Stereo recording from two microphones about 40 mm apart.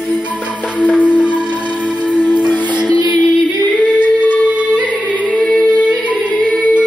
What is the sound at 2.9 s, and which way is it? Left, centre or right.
Music, left.